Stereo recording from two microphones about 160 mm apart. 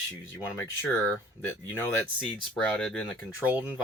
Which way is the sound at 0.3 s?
15° left (ahead or behind).